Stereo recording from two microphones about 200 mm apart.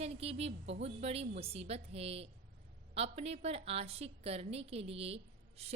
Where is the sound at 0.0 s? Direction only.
30° right (ahead or behind).